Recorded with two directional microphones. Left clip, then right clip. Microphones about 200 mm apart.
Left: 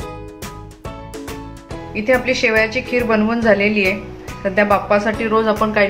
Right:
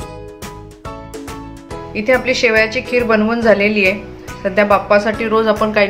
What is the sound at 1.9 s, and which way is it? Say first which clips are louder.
Speech: right 2 dB; 15° right (ahead or behind).